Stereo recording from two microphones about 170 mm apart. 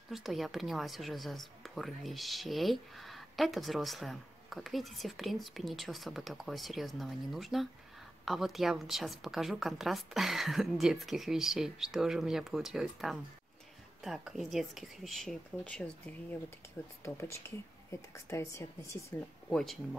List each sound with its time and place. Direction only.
0.1 s a woman's voice: centre (ahead or behind); by 19.1 s 15° left (ahead or behind)
19.5 s a woman's voice: centre (ahead or behind)